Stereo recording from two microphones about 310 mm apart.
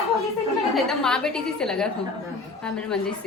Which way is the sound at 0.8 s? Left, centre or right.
Centre.